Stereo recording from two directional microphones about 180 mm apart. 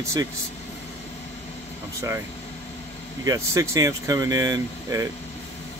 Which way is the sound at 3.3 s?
15° right (ahead or behind).